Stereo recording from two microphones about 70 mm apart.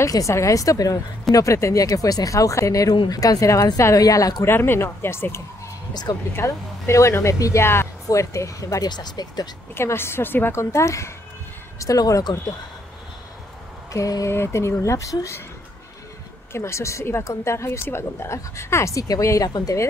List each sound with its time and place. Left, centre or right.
0.0 s speech: left
4.5 s a woman's voice: left
6.1 s speech: left
6.4 s speech: left
7.6 s a woman's voice: left
8.1 s speech: left
8.8 s speech: left
9.8 s a woman's voice: left
10.5 s speech: left
11.8 s speech: left
13.9 s speech: left
14.3 s speech: left
16.5 s a woman's voice: left